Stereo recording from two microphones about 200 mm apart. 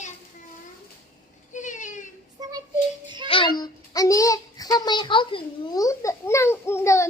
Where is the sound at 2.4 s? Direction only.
20° right (ahead or behind).